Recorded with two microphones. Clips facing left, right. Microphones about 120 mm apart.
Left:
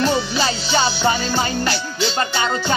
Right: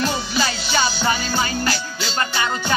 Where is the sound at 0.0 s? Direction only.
35° left (ahead or behind).